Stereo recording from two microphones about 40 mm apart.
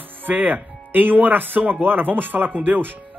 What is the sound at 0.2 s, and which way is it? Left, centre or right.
Speech, right.